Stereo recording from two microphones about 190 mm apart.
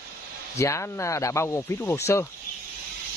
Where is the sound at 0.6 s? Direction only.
15° left (ahead or behind).